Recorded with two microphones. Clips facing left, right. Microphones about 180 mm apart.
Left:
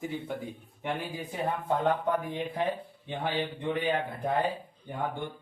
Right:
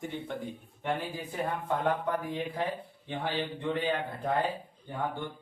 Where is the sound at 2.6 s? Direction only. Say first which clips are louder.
Left 3 dB; 20° left (ahead or behind).